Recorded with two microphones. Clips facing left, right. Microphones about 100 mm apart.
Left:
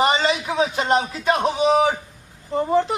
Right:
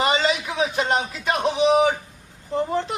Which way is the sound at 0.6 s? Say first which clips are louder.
Left 2 dB; centre (ahead or behind).